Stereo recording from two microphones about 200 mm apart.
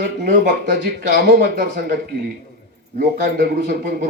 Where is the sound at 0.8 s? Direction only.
50° right (ahead or behind).